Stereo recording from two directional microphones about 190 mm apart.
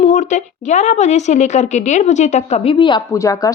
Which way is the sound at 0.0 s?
35° left (ahead or behind).